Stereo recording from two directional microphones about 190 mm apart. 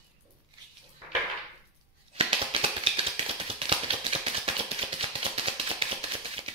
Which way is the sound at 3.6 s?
30° right (ahead or behind).